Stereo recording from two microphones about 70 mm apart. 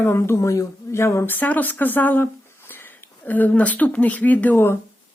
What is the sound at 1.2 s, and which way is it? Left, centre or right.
Speech, left.